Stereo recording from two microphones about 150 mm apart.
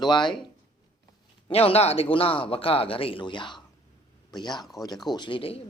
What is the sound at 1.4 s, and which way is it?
A man's voice, 40° left (ahead or behind).